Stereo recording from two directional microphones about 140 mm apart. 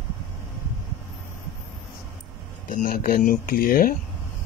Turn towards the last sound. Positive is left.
turn(degrees=90)